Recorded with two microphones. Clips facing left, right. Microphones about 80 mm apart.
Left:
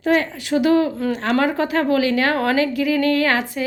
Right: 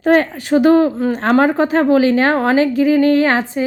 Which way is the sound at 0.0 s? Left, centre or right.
Right.